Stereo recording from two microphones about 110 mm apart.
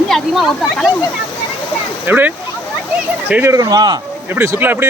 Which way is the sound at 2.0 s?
15° right (ahead or behind).